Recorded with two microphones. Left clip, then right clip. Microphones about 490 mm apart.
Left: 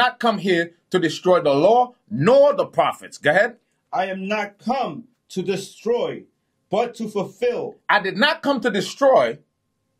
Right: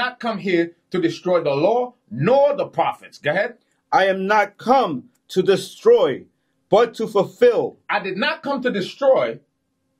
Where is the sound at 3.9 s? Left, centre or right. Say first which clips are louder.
Right 7 dB; right.